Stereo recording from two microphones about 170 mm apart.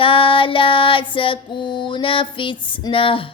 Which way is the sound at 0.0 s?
30° left (ahead or behind).